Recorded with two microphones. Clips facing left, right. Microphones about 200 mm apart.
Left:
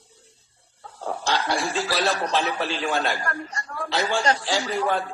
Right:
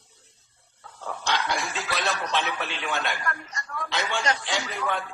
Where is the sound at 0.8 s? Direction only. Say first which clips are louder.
Left 5 dB; 35° left (ahead or behind).